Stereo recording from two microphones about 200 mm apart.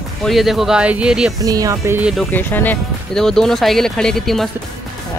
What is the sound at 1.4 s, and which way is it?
Speech, 15° right (ahead or behind).